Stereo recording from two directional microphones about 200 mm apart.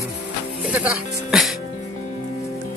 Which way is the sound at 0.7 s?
5° right (ahead or behind).